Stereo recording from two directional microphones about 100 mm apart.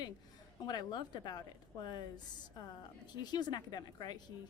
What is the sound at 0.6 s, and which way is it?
A woman's voice, 45° left (ahead or behind).